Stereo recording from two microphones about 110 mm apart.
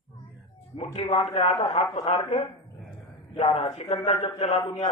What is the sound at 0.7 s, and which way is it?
A man's voice, 60° left (ahead or behind).